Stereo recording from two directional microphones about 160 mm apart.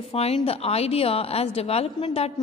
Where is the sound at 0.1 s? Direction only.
40° left (ahead or behind).